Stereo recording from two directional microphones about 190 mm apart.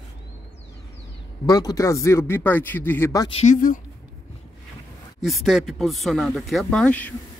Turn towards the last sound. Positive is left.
turn(degrees=5)  # may be behind; listen again after turning